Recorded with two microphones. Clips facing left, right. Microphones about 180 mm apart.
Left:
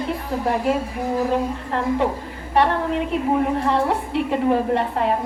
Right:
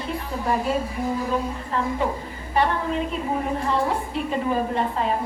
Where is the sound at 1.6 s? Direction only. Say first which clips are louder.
Left 4 dB; 70° left (ahead or behind).